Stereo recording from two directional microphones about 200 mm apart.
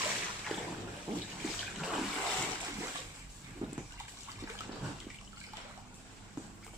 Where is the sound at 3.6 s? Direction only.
20° right (ahead or behind).